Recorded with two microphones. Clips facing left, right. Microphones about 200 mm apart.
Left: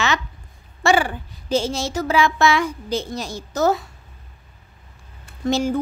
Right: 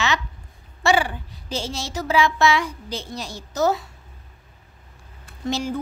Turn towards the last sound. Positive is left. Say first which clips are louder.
# left 5 dB
turn(degrees=50)  # may be behind; listen again after turning